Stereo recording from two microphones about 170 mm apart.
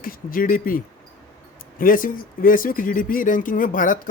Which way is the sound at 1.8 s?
55° left (ahead or behind).